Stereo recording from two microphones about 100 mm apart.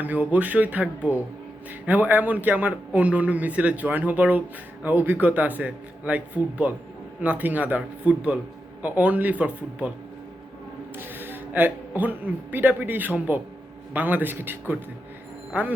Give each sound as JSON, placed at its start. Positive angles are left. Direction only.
{"t": 0.0, "sound": "a man's voice", "side_deg": -15}
{"t": 10.9, "sound": "a man's voice", "side_deg": -20}